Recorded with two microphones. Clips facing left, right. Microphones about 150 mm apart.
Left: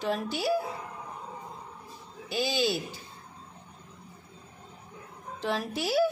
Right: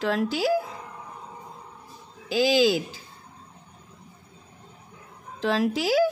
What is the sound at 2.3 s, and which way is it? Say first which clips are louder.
Speech: right 8 dB; 90° right.